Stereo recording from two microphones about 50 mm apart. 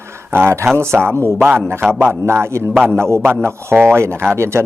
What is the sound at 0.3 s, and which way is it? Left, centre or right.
Speech, right.